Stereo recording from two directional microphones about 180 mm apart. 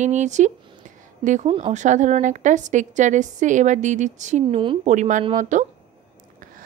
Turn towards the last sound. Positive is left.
turn(degrees=-45)  # may be behind; listen again after turning